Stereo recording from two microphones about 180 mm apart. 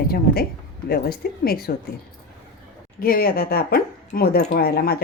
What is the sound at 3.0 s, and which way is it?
Speech, 55° left (ahead or behind).